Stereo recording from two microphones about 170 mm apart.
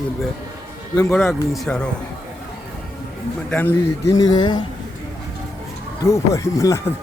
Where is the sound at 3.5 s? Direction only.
10° left (ahead or behind).